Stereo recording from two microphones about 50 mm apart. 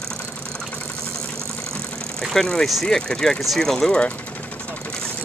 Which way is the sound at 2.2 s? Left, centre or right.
Centre.